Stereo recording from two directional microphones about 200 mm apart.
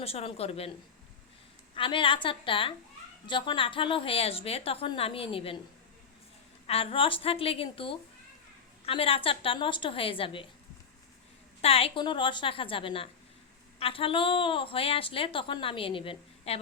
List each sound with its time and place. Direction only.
0.0 s a woman's voice: 30° left (ahead or behind)
1.7 s a woman's voice: 25° left (ahead or behind)
6.7 s a woman's voice: 30° left (ahead or behind)
11.6 s a woman's voice: 30° left (ahead or behind)